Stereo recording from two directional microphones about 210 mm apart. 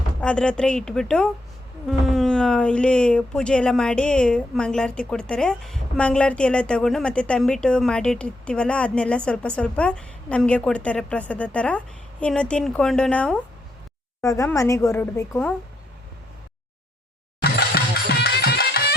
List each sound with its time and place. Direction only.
0.2 s speech: 5° left (ahead or behind)
14.2 s a woman's voice: 15° left (ahead or behind)
17.4 s music: 50° left (ahead or behind)